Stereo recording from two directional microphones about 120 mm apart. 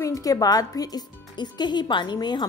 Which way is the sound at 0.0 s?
30° left (ahead or behind).